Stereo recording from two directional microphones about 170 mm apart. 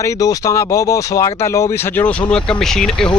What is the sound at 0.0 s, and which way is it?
Speech, 20° left (ahead or behind).